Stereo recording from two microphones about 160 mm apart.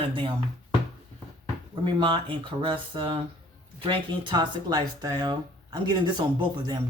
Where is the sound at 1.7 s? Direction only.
30° right (ahead or behind).